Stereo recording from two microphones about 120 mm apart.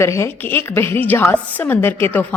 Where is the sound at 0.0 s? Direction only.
20° left (ahead or behind).